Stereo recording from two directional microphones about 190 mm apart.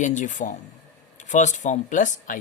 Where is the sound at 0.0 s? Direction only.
40° left (ahead or behind).